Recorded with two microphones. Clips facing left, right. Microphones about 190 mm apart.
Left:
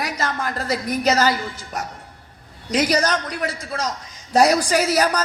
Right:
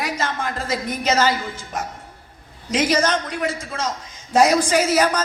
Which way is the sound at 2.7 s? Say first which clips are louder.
Even; 40° left (ahead or behind).